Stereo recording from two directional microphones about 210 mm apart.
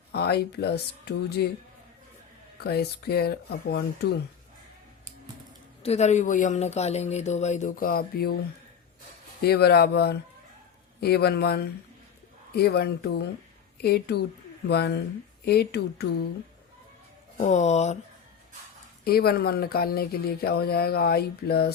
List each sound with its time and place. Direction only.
0.1 s speech: 50° left (ahead or behind)
2.6 s speech: 50° left (ahead or behind)
5.8 s speech: 30° left (ahead or behind); by 8.4 s 45° left (ahead or behind)
9.4 s speech: 50° left (ahead or behind)
17.3 s speech: 35° left (ahead or behind)
19.0 s speech: 45° left (ahead or behind)